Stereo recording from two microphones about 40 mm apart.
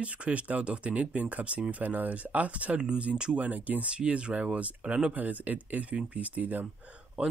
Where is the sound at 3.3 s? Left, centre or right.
Right.